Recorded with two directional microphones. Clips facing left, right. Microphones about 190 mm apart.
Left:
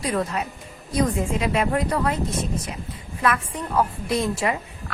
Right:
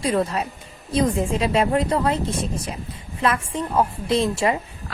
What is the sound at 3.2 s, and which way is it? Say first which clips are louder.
A woman's voice: right 1 dB; 25° right (ahead or behind).